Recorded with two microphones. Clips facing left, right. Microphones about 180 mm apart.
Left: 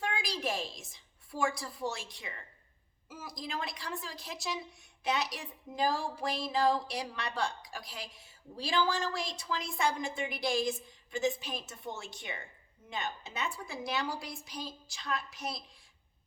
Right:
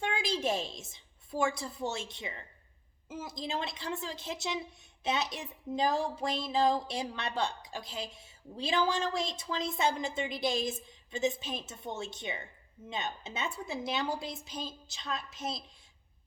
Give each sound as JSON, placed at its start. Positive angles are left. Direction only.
{"t": 0.0, "sound": "a woman's voice", "side_deg": -25}